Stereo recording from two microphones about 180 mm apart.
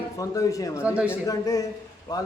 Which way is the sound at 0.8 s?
10° right (ahead or behind).